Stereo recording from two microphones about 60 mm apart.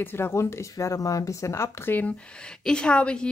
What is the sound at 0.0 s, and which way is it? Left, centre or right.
Speech, left.